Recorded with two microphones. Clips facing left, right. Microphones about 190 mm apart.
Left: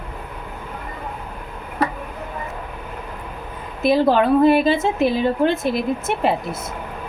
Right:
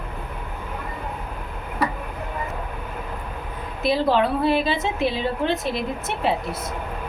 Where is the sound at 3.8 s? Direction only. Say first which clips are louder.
Left 4 dB; 50° left (ahead or behind).